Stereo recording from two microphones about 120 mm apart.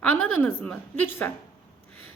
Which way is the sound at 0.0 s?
10° left (ahead or behind).